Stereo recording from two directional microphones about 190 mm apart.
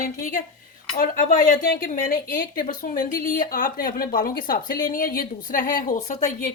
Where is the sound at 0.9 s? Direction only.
45° left (ahead or behind).